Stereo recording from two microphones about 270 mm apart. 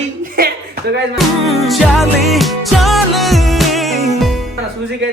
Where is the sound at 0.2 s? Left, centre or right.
Right.